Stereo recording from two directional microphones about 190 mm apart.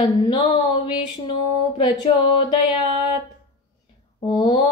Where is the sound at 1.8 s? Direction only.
25° left (ahead or behind).